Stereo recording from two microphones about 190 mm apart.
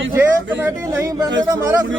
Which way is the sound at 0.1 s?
15° right (ahead or behind).